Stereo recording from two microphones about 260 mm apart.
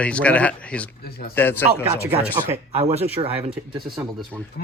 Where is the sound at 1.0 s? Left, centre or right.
Left.